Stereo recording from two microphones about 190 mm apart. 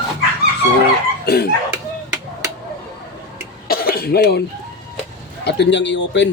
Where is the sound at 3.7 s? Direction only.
55° left (ahead or behind).